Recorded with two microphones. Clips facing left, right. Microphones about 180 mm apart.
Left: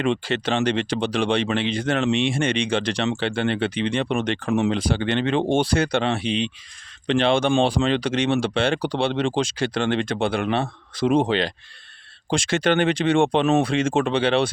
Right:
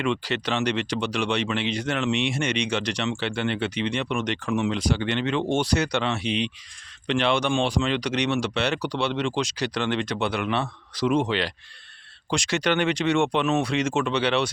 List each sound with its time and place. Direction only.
0.0 s speech: 30° left (ahead or behind)
9.6 s speech: 50° left (ahead or behind)
11.0 s speech: 30° left (ahead or behind)
12.5 s speech: 50° left (ahead or behind)
12.9 s speech: 30° left (ahead or behind)